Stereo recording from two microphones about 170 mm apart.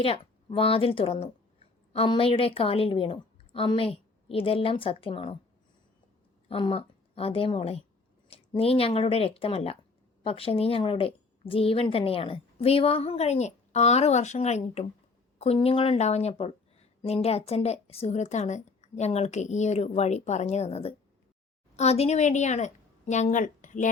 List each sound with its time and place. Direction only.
0.0 s a woman's voice: 35° left (ahead or behind)
6.5 s a woman's voice: 35° left (ahead or behind)